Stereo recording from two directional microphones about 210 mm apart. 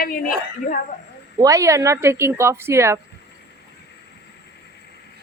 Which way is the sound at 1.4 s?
15° right (ahead or behind).